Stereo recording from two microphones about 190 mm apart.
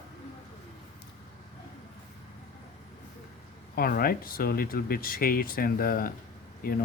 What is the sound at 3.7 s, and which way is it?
Speech, 50° left (ahead or behind).